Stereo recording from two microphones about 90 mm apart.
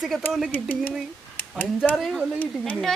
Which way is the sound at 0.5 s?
20° left (ahead or behind).